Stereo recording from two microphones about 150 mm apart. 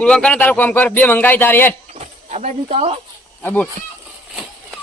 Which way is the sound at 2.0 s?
50° right (ahead or behind).